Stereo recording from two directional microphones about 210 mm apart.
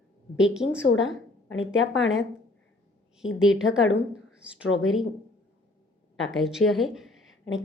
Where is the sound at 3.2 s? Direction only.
70° left (ahead or behind).